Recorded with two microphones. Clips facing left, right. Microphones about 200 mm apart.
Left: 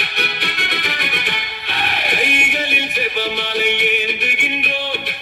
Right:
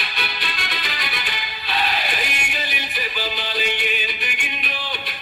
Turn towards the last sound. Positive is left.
turn(degrees=70)  # may be behind; listen again after turning